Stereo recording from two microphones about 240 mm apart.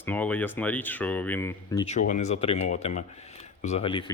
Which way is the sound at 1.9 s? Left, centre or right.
Left.